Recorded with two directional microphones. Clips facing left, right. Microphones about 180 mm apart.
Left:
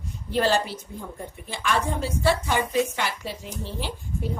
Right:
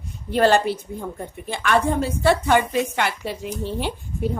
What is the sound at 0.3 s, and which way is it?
A woman's voice, 60° right (ahead or behind).